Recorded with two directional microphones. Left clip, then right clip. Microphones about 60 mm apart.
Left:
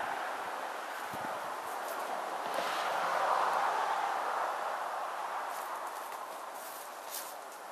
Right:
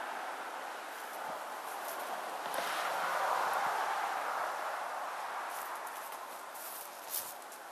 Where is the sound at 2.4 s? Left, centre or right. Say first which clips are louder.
Left 1 dB; right.